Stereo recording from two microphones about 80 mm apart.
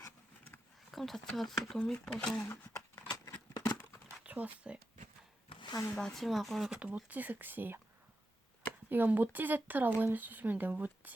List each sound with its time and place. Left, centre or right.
0.9 s speech: centre
3.1 s scissors: left
4.2 s speech: centre
5.5 s a sound: left
5.9 s speech: centre
6.7 s speech: centre
8.9 s speech: right